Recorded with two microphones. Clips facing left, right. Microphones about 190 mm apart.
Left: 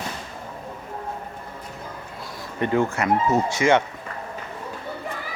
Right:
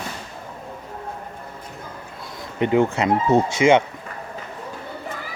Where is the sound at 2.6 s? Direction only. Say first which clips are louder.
Right 3 dB; 15° right (ahead or behind).